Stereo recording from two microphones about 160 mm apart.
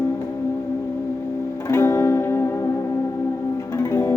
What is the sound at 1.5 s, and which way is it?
Music, 15° left (ahead or behind).